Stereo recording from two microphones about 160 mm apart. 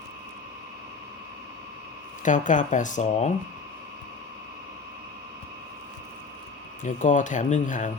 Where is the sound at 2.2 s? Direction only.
55° left (ahead or behind).